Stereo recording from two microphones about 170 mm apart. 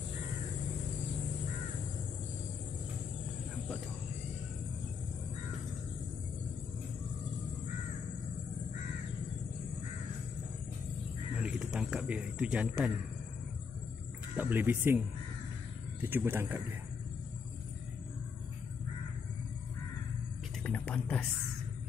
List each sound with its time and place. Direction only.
11.4 s a sound: 5° right (ahead or behind)
14.3 s speech: 10° right (ahead or behind)
16.0 s speech: 10° right (ahead or behind)
20.6 s music: 5° left (ahead or behind)